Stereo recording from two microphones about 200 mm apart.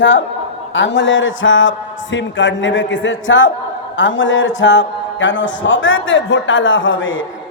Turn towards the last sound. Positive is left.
turn(degrees=70)  # may be behind; listen again after turning